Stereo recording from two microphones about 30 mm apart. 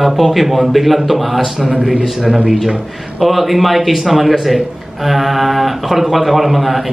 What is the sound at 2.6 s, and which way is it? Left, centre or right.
Speech, centre.